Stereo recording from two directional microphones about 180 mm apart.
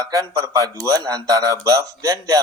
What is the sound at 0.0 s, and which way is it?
Speech, 20° right (ahead or behind).